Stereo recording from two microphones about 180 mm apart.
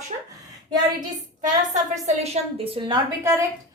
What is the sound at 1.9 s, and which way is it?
A woman's voice, 35° right (ahead or behind).